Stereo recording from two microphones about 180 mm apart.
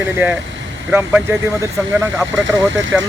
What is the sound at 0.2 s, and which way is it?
Speech, 10° right (ahead or behind).